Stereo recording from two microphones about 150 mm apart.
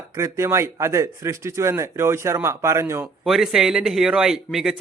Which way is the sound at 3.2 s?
5° right (ahead or behind).